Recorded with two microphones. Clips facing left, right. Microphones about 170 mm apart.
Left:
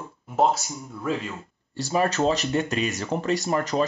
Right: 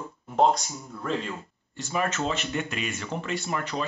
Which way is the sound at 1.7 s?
35° left (ahead or behind).